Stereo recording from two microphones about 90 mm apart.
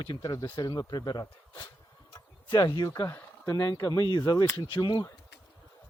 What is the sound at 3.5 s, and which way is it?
Speech, 45° left (ahead or behind).